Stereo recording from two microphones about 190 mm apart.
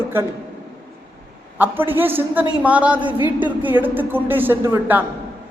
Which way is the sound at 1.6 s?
10° right (ahead or behind).